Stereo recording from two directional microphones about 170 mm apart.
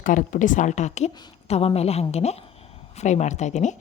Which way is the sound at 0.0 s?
50° left (ahead or behind).